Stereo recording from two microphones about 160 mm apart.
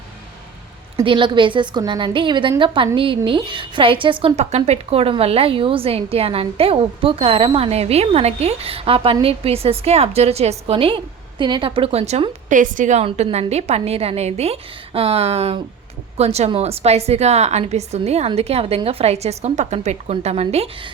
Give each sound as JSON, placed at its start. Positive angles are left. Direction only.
{"t": 1.0, "sound": "a woman's voice", "side_deg": -30}